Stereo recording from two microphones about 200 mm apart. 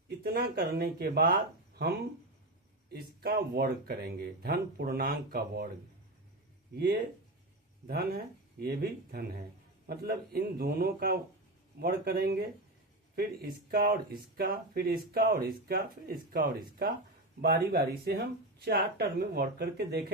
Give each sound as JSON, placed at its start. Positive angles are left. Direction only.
{"t": 0.2, "sound": "speech", "side_deg": -50}
{"t": 2.9, "sound": "speech", "side_deg": -50}
{"t": 7.9, "sound": "speech", "side_deg": -50}